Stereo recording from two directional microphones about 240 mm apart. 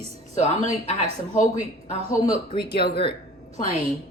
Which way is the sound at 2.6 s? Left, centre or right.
Left.